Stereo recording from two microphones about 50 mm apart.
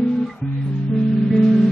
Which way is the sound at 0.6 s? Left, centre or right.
Left.